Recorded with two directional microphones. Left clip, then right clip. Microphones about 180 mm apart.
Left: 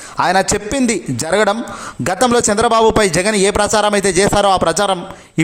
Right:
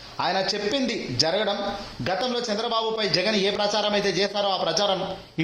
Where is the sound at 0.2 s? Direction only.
45° left (ahead or behind).